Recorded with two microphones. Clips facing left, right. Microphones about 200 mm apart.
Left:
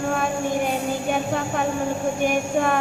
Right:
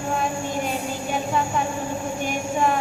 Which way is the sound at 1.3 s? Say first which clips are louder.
Even; 60° left (ahead or behind).